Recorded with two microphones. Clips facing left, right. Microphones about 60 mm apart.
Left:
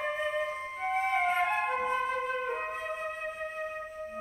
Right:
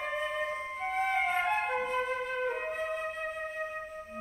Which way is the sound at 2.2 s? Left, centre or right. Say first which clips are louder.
Even; centre.